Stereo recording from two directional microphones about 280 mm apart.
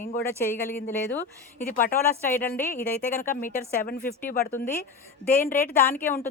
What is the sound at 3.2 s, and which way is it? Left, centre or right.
Speech, left.